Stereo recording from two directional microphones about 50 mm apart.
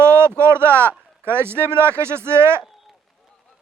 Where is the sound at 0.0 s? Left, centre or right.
Right.